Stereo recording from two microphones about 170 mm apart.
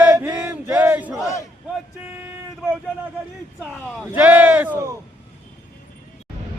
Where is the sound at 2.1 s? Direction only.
10° right (ahead or behind).